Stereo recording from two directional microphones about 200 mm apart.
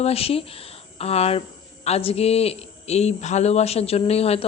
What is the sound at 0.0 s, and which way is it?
Speech, 30° left (ahead or behind).